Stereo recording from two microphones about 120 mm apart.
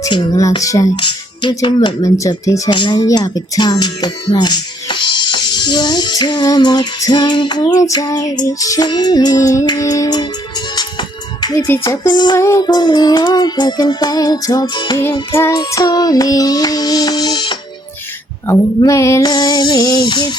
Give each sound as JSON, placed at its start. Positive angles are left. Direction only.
{"t": 0.3, "sound": "speech", "side_deg": 30}
{"t": 0.9, "sound": "speech", "side_deg": 40}
{"t": 2.1, "sound": "speech", "side_deg": 25}
{"t": 2.7, "sound": "music", "side_deg": 40}
{"t": 4.3, "sound": "speech", "side_deg": 35}
{"t": 8.4, "sound": "music", "side_deg": 30}
{"t": 12.4, "sound": "music", "side_deg": 25}
{"t": 15.3, "sound": "music", "side_deg": 25}
{"t": 18.8, "sound": "music", "side_deg": 25}